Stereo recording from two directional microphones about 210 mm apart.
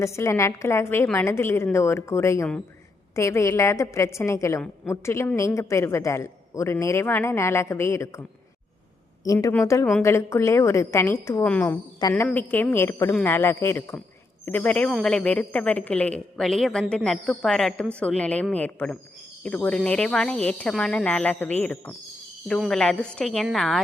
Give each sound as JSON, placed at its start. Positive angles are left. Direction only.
{"t": 0.0, "sound": "a woman's voice", "side_deg": 15}
{"t": 9.2, "sound": "a woman's voice", "side_deg": 15}